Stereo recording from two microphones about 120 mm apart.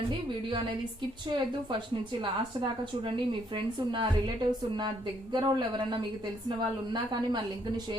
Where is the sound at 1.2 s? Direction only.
40° right (ahead or behind).